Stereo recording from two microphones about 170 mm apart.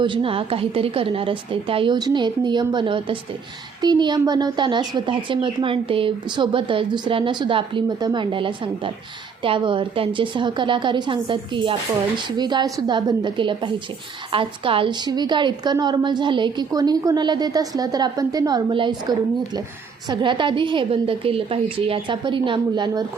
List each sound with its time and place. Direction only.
0.0 s a woman's voice: 30° right (ahead or behind)